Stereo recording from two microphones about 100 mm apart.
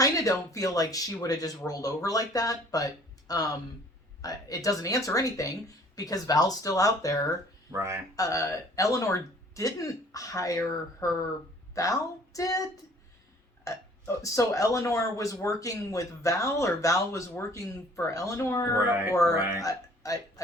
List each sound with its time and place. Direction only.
0.0 s speech: 35° left (ahead or behind)
7.7 s speech: 30° right (ahead or behind)
8.1 s a woman's voice: 35° left (ahead or behind)
13.7 s speech: 30° left (ahead or behind)